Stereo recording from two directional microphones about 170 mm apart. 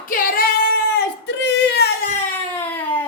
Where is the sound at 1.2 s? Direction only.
90° left.